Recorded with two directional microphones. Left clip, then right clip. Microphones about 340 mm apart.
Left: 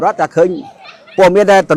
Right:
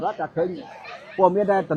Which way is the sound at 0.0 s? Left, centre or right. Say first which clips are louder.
Left 13 dB; centre.